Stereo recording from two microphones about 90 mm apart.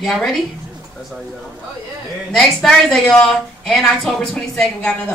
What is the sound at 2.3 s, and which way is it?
A woman's voice, 5° left (ahead or behind).